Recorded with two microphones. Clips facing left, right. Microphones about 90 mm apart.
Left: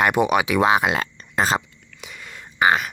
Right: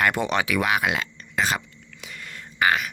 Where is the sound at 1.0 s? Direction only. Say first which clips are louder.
Left 3 dB; 35° left (ahead or behind).